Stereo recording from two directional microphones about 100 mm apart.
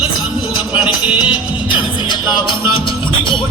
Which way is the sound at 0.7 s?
15° right (ahead or behind).